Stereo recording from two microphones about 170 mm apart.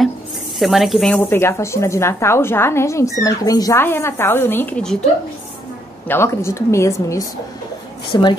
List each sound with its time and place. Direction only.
0.6 s speech: centre (ahead or behind)
1.3 s a woman's voice: 15° left (ahead or behind)
6.0 s a woman's voice: 15° left (ahead or behind)